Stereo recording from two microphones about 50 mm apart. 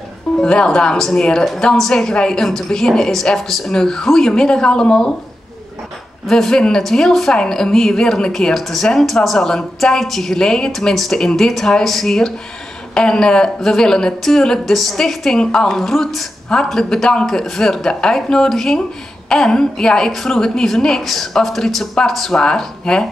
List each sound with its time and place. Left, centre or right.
0.4 s a woman's voice: left
6.3 s a woman's voice: centre